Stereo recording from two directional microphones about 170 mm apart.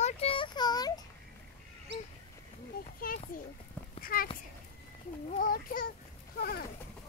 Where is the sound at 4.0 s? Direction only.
60° left (ahead or behind).